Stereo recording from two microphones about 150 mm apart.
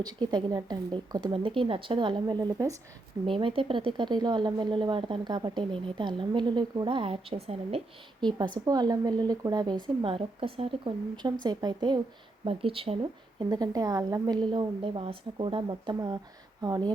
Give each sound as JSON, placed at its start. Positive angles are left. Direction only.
{"t": 0.0, "sound": "speech", "side_deg": -30}
{"t": 3.3, "sound": "speech", "side_deg": -35}
{"t": 8.2, "sound": "speech", "side_deg": -30}